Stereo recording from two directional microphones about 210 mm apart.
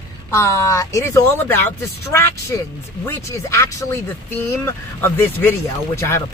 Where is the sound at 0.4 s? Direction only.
15° left (ahead or behind).